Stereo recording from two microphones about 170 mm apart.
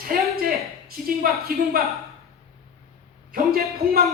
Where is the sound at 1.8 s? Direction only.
60° right (ahead or behind).